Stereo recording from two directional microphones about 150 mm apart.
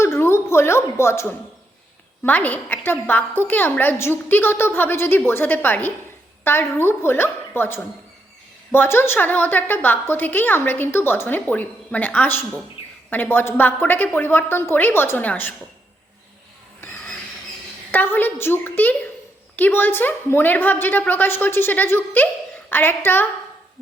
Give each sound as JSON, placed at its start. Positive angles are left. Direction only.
{"t": 0.0, "sound": "a sound", "side_deg": 15}
{"t": 2.2, "sound": "a woman's voice", "side_deg": 10}
{"t": 17.9, "sound": "a woman's voice", "side_deg": 15}